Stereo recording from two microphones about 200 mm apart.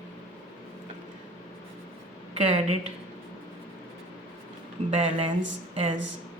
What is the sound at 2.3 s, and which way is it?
Speech, 30° right (ahead or behind).